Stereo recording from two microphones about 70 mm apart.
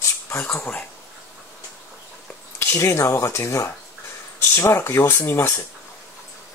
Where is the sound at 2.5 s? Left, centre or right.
Left.